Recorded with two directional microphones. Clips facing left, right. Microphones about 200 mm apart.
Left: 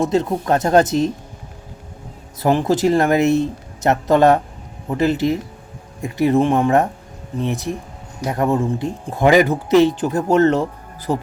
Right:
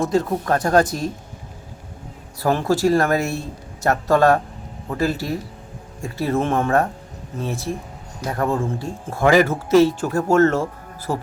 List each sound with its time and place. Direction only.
0.1 s speech: 20° left (ahead or behind)
2.4 s speech: 20° left (ahead or behind)